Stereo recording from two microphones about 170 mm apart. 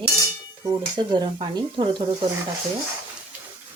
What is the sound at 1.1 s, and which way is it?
Speech, 25° right (ahead or behind).